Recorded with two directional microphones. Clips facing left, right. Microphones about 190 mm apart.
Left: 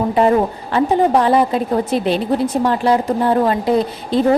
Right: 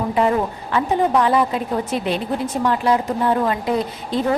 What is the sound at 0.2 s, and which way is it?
A woman's voice, 35° left (ahead or behind).